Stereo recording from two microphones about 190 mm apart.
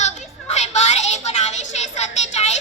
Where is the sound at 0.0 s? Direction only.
35° left (ahead or behind).